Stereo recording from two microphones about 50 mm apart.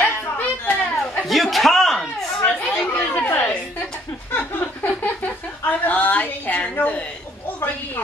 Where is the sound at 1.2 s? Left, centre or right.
Centre.